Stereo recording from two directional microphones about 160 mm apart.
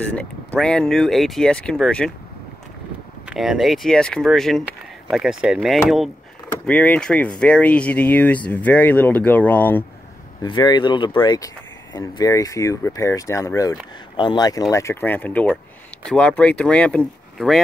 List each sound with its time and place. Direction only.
0.0 s speech: 5° left (ahead or behind)
3.3 s speech: centre (ahead or behind)
10.4 s speech: 25° left (ahead or behind); by 17.6 s 5° left (ahead or behind)